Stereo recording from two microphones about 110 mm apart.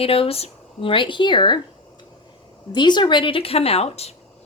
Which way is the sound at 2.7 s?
45° left (ahead or behind).